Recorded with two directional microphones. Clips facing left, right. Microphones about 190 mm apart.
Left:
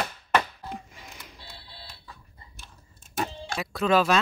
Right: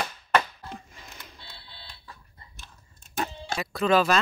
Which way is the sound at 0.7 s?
5° left (ahead or behind).